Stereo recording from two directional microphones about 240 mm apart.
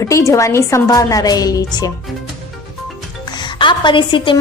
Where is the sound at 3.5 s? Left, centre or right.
Centre.